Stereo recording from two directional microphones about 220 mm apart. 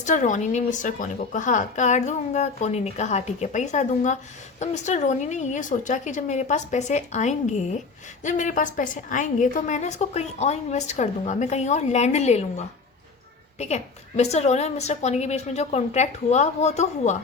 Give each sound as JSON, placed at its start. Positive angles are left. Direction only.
{"t": 0.0, "sound": "a woman's voice", "side_deg": 35}